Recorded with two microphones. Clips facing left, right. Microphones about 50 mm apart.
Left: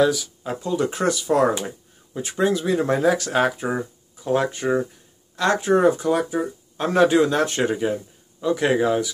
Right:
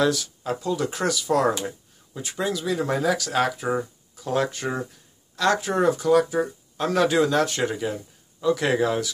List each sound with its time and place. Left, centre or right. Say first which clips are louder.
0.0 s speech: left 3 dB; centre
0.5 s speech: left 2 dB; left
3.6 s speech: even; centre